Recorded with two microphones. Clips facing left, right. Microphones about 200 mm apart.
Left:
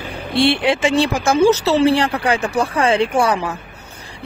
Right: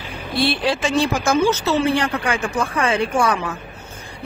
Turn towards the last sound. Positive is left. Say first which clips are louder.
# left 2 dB
turn(degrees=35)  # may be behind; listen again after turning